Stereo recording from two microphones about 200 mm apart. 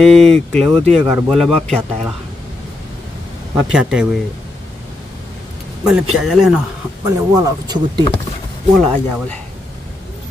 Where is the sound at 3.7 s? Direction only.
5° right (ahead or behind).